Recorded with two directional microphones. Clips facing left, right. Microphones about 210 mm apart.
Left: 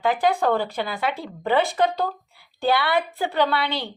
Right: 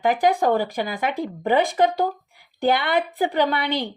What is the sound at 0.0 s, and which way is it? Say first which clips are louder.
A woman's voice: right 2 dB; 15° right (ahead or behind).